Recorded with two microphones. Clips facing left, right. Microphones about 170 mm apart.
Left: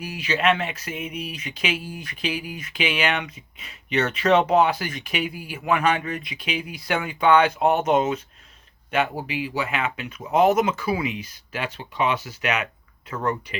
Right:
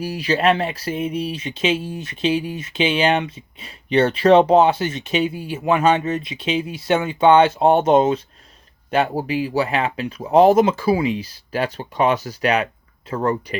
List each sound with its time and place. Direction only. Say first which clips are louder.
0.0 s speech: right 5 dB; 35° right (ahead or behind)